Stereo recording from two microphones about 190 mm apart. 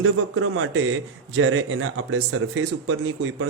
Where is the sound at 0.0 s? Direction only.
90° right.